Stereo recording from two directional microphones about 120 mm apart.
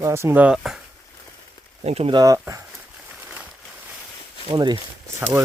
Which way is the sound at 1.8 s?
60° right (ahead or behind).